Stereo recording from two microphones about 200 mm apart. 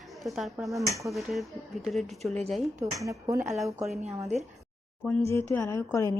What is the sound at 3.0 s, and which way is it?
Speech, 15° right (ahead or behind).